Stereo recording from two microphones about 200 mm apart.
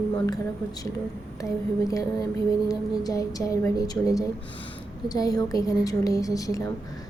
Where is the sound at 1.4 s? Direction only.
15° left (ahead or behind).